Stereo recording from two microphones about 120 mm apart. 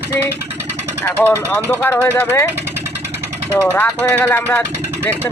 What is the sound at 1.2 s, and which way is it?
Speech, 15° left (ahead or behind).